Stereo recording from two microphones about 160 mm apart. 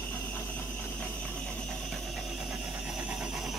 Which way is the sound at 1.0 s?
5° left (ahead or behind).